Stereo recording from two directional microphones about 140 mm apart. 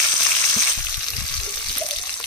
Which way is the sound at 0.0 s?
20° left (ahead or behind).